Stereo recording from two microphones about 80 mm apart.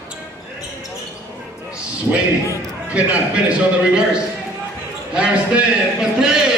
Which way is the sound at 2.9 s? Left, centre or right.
Centre.